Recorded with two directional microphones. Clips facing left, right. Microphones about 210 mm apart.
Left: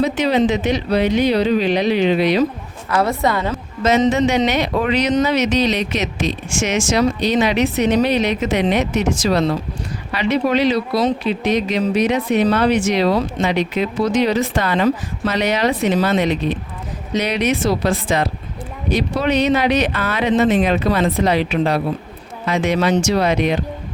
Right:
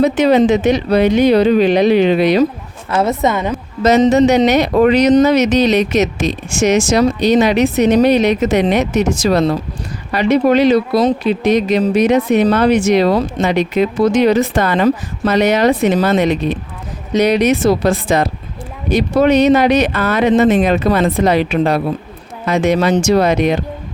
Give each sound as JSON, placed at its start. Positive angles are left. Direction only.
{"t": 0.0, "sound": "speech", "side_deg": -50}
{"t": 2.9, "sound": "a woman's voice", "side_deg": -20}
{"t": 3.8, "sound": "speech", "side_deg": -40}